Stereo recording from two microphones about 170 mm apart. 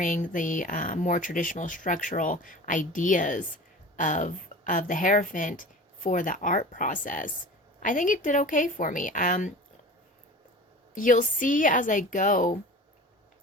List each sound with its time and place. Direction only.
0.0 s speech: 50° left (ahead or behind)
10.9 s speech: 50° left (ahead or behind)